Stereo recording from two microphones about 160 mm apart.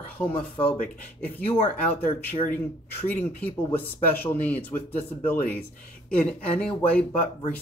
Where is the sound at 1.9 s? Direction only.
10° left (ahead or behind).